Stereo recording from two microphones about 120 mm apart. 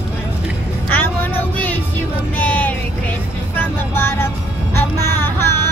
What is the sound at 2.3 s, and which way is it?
Vehicle, 15° left (ahead or behind).